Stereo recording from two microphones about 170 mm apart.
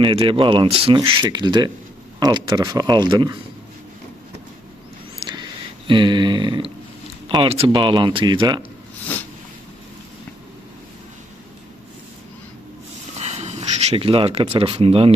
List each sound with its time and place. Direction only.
0.0 s speech: 30° right (ahead or behind)
5.2 s a sound: 25° right (ahead or behind)
5.9 s speech: 30° right (ahead or behind)
13.1 s speech: 40° right (ahead or behind)